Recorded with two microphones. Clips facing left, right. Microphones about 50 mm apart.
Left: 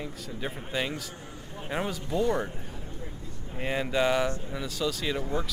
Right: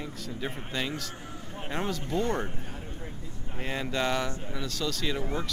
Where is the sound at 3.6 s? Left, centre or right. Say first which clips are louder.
Left 3 dB; centre.